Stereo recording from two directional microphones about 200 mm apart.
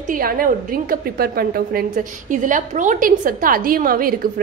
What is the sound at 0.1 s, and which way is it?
A woman's voice, 45° right (ahead or behind).